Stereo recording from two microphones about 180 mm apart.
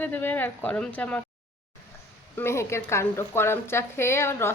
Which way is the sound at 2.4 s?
15° left (ahead or behind).